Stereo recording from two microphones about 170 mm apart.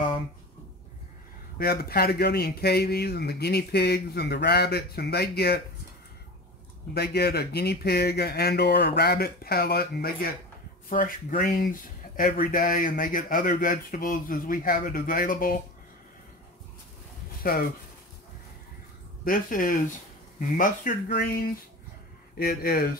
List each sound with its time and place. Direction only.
1.6 s a man's voice: 65° left (ahead or behind)
6.9 s a man's voice: 70° left (ahead or behind); by 15.6 s 50° left (ahead or behind)
17.4 s speech: 60° left (ahead or behind)
19.2 s speech: 55° left (ahead or behind)
22.4 s speech: 60° left (ahead or behind)